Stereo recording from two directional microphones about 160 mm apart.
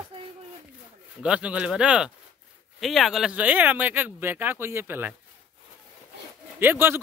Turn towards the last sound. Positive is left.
turn(degrees=-15)  # may be behind; listen again after turning